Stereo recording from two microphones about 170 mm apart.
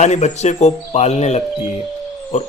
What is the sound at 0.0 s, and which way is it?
A man's voice, 40° left (ahead or behind).